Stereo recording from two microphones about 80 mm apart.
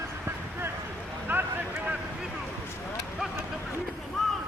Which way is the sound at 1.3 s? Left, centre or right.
Right.